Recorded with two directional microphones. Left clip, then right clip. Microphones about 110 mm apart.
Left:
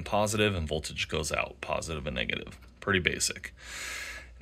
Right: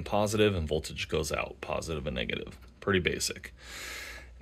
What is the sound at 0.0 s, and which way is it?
Speech, 50° right (ahead or behind).